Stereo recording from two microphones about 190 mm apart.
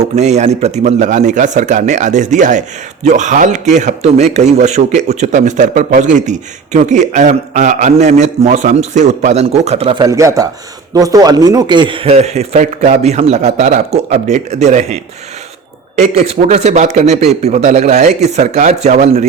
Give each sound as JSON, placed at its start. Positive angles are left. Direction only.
{"t": 0.2, "sound": "a man's voice", "side_deg": -35}
{"t": 10.0, "sound": "a man's voice", "side_deg": -15}